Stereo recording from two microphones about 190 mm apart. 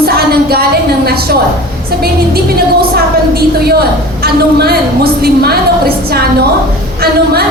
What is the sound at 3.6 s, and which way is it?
A woman's voice, 55° right (ahead or behind).